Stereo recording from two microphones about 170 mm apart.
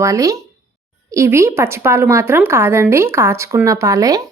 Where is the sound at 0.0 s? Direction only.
20° right (ahead or behind).